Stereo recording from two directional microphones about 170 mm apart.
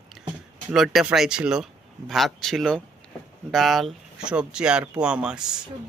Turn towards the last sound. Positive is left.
turn(degrees=-5)  # may be behind; listen again after turning